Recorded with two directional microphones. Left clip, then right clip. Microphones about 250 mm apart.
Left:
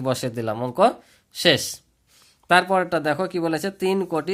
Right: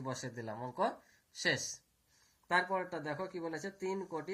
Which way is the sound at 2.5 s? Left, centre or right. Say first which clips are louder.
Left 15 dB; left.